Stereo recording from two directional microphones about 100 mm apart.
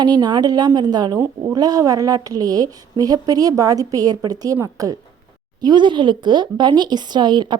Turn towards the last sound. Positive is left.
turn(degrees=-50)  # may be behind; listen again after turning